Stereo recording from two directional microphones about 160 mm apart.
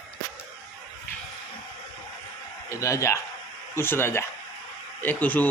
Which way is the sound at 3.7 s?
15° left (ahead or behind).